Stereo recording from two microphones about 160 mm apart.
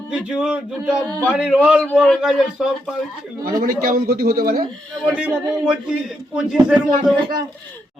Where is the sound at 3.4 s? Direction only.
60° right (ahead or behind).